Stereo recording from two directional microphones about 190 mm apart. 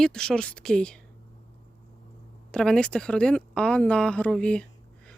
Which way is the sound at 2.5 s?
5° left (ahead or behind).